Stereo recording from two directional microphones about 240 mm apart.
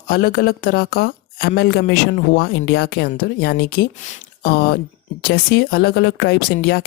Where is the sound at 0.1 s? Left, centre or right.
Left.